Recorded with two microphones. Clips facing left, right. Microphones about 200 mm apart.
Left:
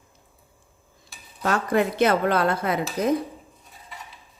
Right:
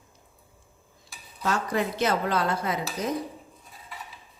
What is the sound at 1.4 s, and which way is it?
Speech, 55° left (ahead or behind).